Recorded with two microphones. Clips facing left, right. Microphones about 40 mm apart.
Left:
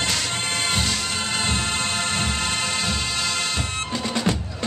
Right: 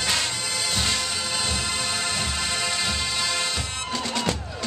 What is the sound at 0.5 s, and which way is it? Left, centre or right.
Music, left.